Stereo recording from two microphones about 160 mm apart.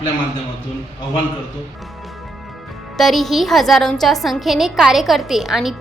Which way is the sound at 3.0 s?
Centre (ahead or behind).